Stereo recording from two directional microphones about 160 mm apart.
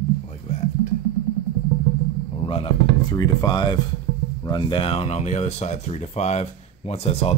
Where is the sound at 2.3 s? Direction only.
35° left (ahead or behind).